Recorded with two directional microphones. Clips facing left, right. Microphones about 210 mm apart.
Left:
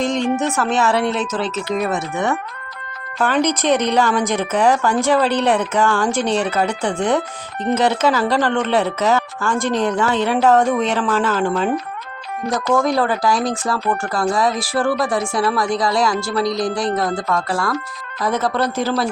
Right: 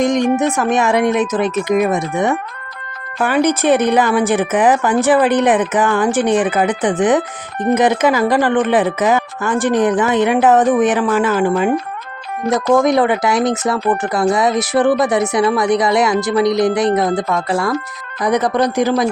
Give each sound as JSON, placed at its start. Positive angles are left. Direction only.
{"t": 0.0, "sound": "speech", "side_deg": -15}
{"t": 3.2, "sound": "speech", "side_deg": -10}